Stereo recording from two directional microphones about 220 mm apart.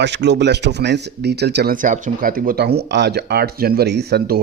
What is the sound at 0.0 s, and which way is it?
Speech, 50° right (ahead or behind).